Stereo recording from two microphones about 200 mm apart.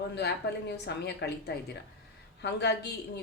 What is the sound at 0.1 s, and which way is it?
A woman's voice, 55° left (ahead or behind).